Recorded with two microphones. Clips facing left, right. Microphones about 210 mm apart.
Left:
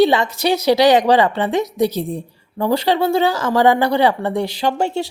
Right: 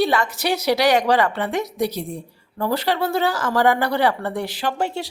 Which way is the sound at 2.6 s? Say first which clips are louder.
Left 5 dB; 20° left (ahead or behind).